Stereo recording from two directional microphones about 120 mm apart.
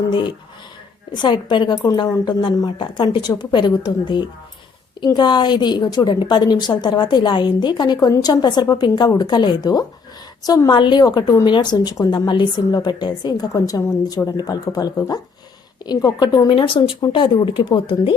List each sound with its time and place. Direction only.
0.1 s a woman's voice: 40° left (ahead or behind)